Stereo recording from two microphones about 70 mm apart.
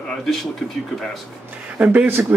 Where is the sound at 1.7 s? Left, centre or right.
Right.